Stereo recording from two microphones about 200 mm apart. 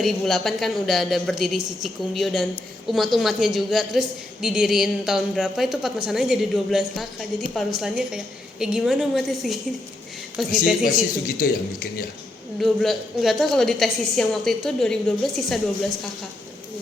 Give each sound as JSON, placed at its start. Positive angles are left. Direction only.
{"t": 0.0, "sound": "a woman's voice", "side_deg": 0}
{"t": 10.8, "sound": "a man's voice", "side_deg": 45}
{"t": 12.5, "sound": "a woman's voice", "side_deg": 0}